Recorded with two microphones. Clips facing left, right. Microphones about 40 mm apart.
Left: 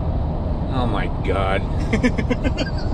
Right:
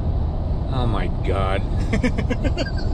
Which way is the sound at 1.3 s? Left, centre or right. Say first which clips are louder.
Left 2 dB; left.